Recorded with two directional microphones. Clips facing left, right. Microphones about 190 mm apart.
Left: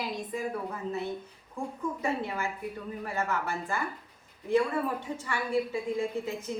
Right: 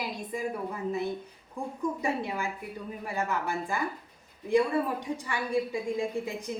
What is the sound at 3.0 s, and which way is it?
Speech, 15° right (ahead or behind).